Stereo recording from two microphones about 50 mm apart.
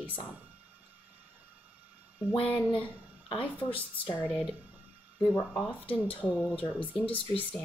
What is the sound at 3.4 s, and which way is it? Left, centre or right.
Speech, left.